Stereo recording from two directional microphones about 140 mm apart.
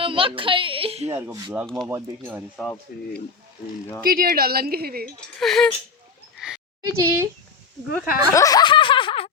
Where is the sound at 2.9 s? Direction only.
90° left.